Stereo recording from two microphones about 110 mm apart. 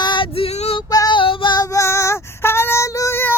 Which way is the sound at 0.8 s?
35° left (ahead or behind).